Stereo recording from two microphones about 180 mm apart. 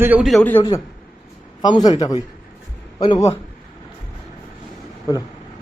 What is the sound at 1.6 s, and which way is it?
A man's voice, 25° left (ahead or behind).